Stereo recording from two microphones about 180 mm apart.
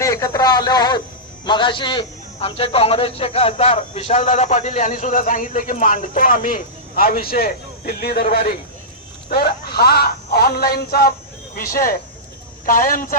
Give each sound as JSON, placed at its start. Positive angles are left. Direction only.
{"t": 0.0, "sound": "a man's voice", "side_deg": 20}